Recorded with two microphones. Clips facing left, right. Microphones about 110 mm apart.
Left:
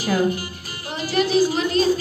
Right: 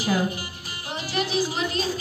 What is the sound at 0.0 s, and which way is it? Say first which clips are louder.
Speech: left 4 dB; 20° right (ahead or behind).